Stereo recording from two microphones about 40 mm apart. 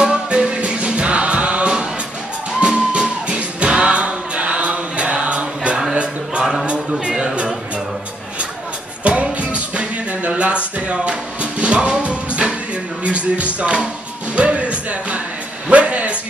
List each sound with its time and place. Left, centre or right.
0.1 s music: right
6.9 s music: centre
9.0 s music: right
15.7 s a sound: right